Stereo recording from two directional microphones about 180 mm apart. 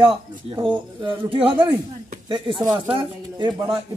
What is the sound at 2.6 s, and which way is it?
Speech, 30° right (ahead or behind).